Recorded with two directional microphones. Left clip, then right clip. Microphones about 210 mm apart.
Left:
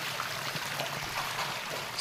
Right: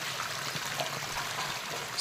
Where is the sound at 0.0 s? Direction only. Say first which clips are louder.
Even; centre (ahead or behind).